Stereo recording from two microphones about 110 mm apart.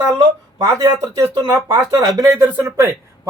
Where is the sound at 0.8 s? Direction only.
30° right (ahead or behind).